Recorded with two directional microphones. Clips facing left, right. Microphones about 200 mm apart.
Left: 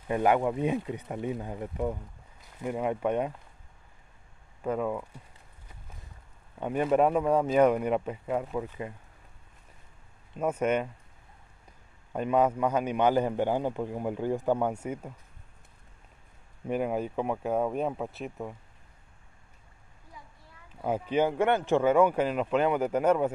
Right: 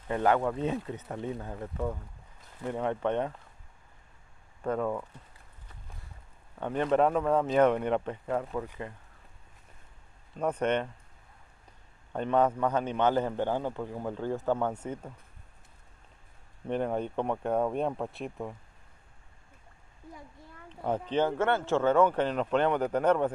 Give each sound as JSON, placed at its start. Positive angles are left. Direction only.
{"t": 0.1, "sound": "a man's voice", "side_deg": 15}
{"t": 4.6, "sound": "a man's voice", "side_deg": 10}
{"t": 6.6, "sound": "a man's voice", "side_deg": 10}
{"t": 10.3, "sound": "a man's voice", "side_deg": 5}
{"t": 12.1, "sound": "a man's voice", "side_deg": 10}
{"t": 16.6, "sound": "speech", "side_deg": 5}
{"t": 20.8, "sound": "a man's voice", "side_deg": 10}